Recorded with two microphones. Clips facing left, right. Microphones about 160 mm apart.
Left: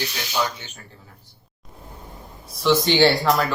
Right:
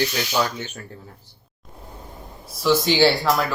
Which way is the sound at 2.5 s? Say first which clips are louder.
Even; 5° right (ahead or behind).